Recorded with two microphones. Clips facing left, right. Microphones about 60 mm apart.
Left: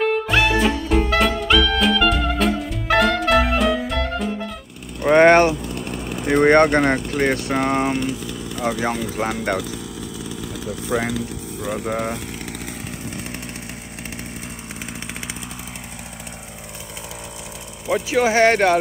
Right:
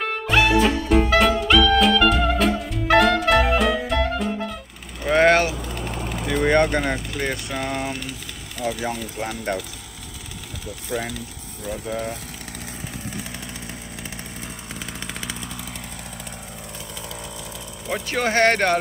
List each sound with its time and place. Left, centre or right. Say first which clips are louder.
0.0 s music: left 2 dB; centre
5.0 s vehicle: left 5 dB; left
6.3 s speech: left 5 dB; left
10.9 s speech: left 5 dB; left
17.8 s speech: left 5 dB; centre